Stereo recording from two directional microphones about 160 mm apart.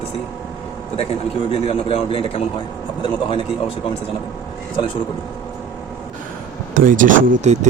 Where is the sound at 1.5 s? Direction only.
40° left (ahead or behind).